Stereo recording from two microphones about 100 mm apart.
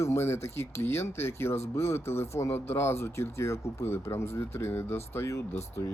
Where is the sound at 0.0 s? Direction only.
25° left (ahead or behind).